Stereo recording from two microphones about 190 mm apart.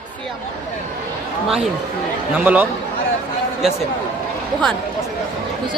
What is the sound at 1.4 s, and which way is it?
Speech, 5° right (ahead or behind).